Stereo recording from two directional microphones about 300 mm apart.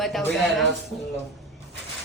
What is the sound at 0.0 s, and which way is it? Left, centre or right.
Speech, centre.